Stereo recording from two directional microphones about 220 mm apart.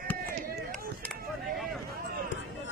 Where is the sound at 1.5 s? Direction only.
Centre (ahead or behind).